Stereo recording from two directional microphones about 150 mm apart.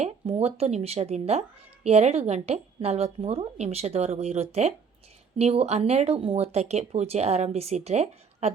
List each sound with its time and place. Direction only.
0.0 s speech: 45° right (ahead or behind)